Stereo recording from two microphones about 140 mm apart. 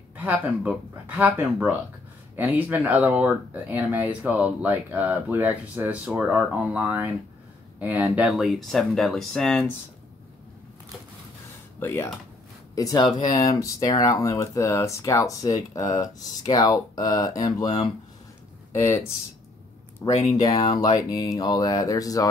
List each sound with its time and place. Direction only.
0.1 s speech: 10° right (ahead or behind)
11.8 s speech: 15° left (ahead or behind)
12.7 s speech: 25° left (ahead or behind)
20.0 s speech: 25° left (ahead or behind)